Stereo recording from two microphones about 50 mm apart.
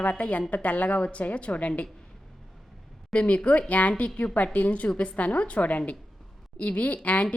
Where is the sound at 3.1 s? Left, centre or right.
Left.